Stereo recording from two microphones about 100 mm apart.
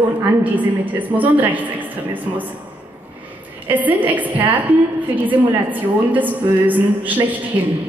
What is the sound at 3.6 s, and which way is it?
A woman's voice, 15° right (ahead or behind).